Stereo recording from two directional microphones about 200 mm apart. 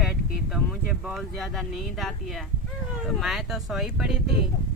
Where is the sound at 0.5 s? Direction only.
Centre (ahead or behind).